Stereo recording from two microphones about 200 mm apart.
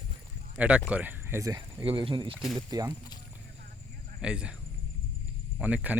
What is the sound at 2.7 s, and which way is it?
Speech, 20° right (ahead or behind).